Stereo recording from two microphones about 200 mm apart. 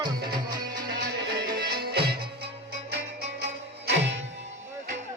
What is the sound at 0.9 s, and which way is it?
Music, 55° right (ahead or behind).